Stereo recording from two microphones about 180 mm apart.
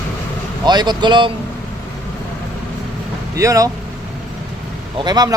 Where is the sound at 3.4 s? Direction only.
20° right (ahead or behind).